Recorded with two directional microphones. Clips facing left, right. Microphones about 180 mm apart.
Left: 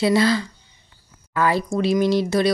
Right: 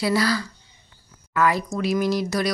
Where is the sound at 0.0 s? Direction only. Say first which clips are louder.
Left 4 dB; 25° left (ahead or behind).